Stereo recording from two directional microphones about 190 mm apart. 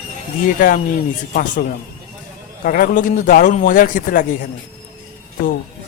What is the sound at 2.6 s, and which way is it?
A man's voice, 50° left (ahead or behind).